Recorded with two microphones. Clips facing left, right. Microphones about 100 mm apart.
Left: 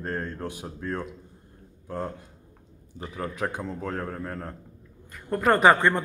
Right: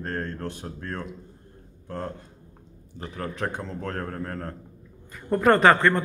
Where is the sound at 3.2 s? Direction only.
10° left (ahead or behind).